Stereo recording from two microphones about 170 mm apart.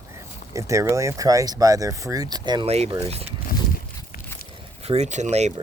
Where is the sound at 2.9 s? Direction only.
35° right (ahead or behind).